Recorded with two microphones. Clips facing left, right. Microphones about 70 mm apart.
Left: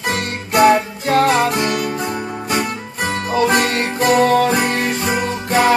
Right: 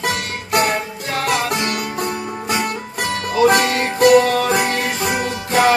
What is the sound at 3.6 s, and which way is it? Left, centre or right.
Music, left.